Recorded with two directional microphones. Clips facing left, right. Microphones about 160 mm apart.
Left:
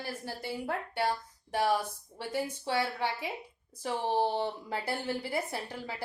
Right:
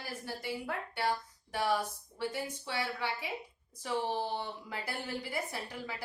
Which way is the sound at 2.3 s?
30° left (ahead or behind).